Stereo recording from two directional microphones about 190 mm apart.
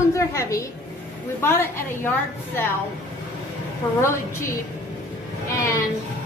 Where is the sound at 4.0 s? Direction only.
15° left (ahead or behind).